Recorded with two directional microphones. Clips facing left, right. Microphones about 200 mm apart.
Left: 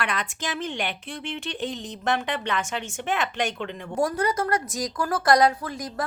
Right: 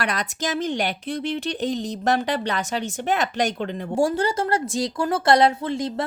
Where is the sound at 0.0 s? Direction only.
40° right (ahead or behind).